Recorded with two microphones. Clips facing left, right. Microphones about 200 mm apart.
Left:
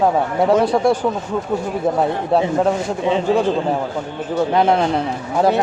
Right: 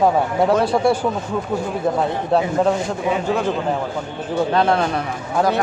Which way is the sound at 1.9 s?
5° left (ahead or behind).